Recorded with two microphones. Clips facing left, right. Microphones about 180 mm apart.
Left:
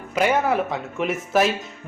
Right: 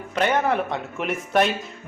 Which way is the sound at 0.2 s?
10° left (ahead or behind).